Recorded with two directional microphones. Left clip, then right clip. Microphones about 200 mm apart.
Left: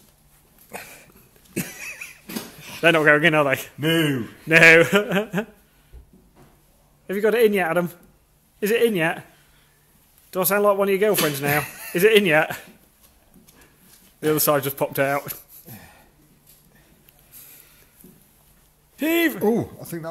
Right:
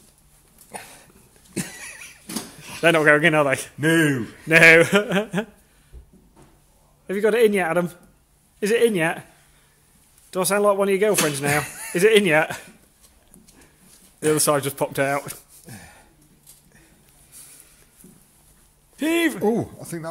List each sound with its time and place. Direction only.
0.7 s a sound: 10° left (ahead or behind)
2.6 s a man's voice: 5° right (ahead or behind)
3.8 s speech: 20° right (ahead or behind)
4.5 s a man's voice: 5° right (ahead or behind)
7.1 s a man's voice: 5° right (ahead or behind)
10.3 s a man's voice: 5° right (ahead or behind)
14.2 s a man's voice: centre (ahead or behind)
15.6 s a sound: 25° right (ahead or behind)
18.9 s a man's voice: centre (ahead or behind)